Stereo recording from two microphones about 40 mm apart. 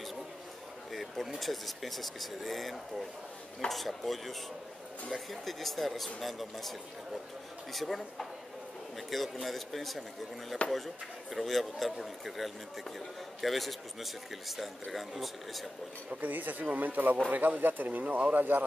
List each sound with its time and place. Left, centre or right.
0.9 s a sound: centre
1.4 s speech: centre
7.7 s speech: centre
16.2 s speech: right